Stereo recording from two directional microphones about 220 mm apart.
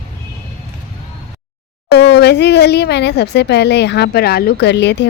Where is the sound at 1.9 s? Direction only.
50° left (ahead or behind).